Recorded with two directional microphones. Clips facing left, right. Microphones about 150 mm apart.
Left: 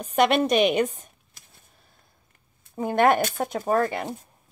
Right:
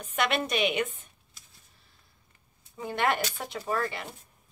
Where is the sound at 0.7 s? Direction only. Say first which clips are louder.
Left 7 dB; 40° left (ahead or behind).